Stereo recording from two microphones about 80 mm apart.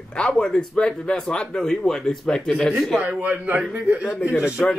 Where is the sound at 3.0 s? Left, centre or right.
Right.